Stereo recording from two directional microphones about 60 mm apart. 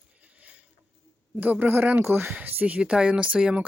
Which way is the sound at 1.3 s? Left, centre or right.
Right.